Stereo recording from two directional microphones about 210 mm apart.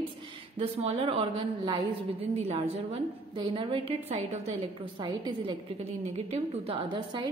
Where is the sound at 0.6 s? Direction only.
30° right (ahead or behind).